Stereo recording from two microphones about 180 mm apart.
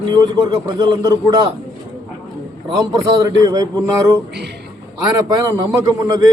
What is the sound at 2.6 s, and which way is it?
A man's voice, 25° right (ahead or behind).